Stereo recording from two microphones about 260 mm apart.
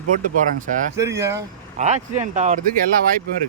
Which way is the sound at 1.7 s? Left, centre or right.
Right.